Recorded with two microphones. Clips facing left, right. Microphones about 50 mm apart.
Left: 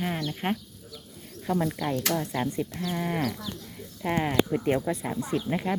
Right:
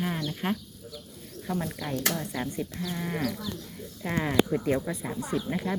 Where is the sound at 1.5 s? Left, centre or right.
Left.